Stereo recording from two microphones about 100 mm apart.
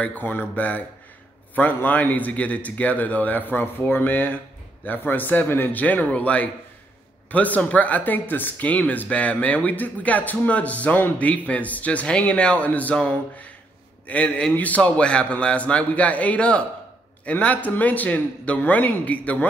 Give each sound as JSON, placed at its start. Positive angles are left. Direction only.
{"t": 0.0, "sound": "speech", "side_deg": 15}